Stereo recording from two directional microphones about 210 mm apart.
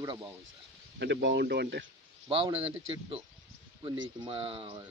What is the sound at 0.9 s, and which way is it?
Speech, 55° right (ahead or behind).